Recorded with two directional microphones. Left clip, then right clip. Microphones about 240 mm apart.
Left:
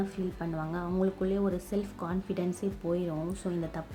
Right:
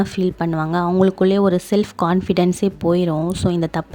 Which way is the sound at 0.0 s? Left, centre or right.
Right.